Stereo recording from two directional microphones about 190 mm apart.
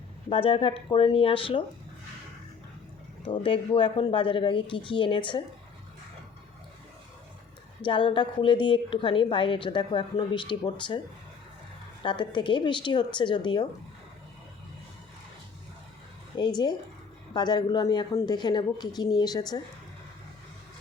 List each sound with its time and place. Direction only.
0.3 s a woman's voice: 30° left (ahead or behind)
3.2 s a woman's voice: 25° left (ahead or behind)
7.9 s a woman's voice: 25° left (ahead or behind)
12.0 s a woman's voice: 25° left (ahead or behind)
17.3 s a woman's voice: 20° left (ahead or behind)